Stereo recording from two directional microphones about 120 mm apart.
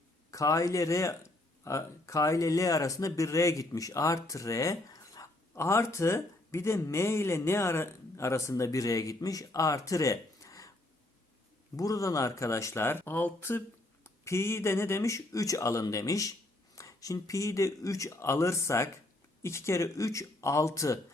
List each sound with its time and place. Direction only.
0.3 s speech: 25° left (ahead or behind)
11.8 s speech: 30° left (ahead or behind)